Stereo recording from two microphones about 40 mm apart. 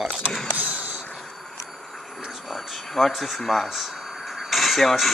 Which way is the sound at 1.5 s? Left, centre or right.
Centre.